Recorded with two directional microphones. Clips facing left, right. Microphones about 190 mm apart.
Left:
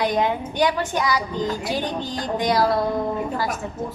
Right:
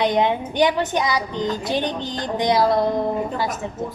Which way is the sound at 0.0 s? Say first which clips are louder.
Right 2 dB; 20° right (ahead or behind).